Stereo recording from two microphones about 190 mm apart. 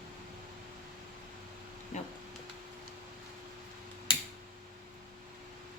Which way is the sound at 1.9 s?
40° left (ahead or behind).